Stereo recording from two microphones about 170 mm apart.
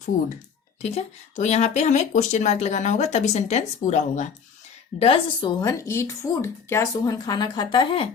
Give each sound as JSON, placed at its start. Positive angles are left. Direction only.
{"t": 0.8, "sound": "speech", "side_deg": 40}
{"t": 4.9, "sound": "a woman's voice", "side_deg": 35}